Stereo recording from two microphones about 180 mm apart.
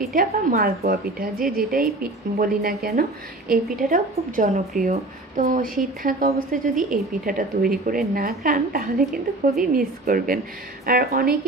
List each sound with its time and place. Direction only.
0.0 s a woman's voice: 50° right (ahead or behind)